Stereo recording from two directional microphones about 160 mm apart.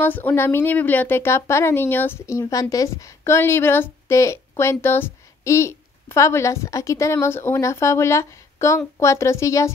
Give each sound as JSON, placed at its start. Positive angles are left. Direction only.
{"t": 0.0, "sound": "a woman's voice", "side_deg": 10}